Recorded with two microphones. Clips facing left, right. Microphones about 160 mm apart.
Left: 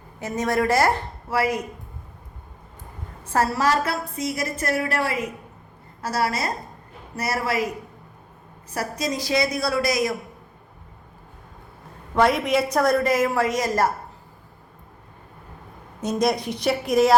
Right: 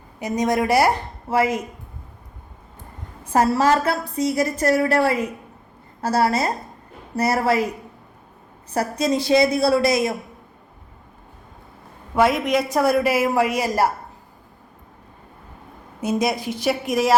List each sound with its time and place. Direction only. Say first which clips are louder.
0.2 s a woman's voice: right 2 dB; 15° right (ahead or behind)
1.3 s a woman's voice: right 3 dB; 25° right (ahead or behind)
3.3 s a woman's voice: right 4 dB; 25° right (ahead or behind)
8.7 s a woman's voice: right 6 dB; 25° right (ahead or behind)
12.1 s a woman's voice: right 1 dB; centre (ahead or behind)
16.0 s a woman's voice: even; 5° right (ahead or behind)